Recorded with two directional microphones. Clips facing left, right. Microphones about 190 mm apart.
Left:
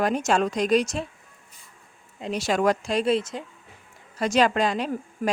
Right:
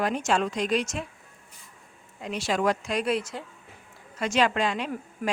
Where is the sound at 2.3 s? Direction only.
45° left (ahead or behind).